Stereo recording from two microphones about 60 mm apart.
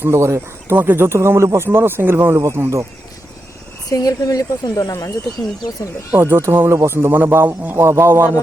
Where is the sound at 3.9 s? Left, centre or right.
Left.